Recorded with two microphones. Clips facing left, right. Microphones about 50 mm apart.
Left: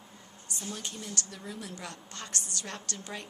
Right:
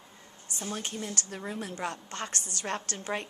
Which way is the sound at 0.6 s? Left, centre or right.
Right.